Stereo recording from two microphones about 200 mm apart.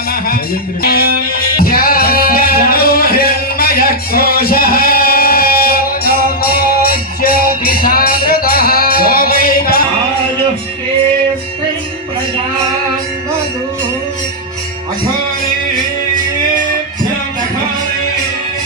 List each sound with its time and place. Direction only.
0.8 s music: 50° left (ahead or behind)